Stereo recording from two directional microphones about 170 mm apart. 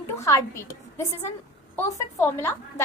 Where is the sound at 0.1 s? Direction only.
15° left (ahead or behind).